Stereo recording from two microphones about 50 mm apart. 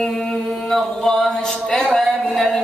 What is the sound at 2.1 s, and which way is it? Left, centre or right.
Music, centre.